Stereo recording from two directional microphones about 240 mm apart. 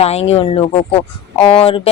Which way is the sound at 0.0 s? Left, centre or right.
Left.